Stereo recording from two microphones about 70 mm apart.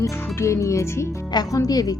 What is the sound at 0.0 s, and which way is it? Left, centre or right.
Speech, left.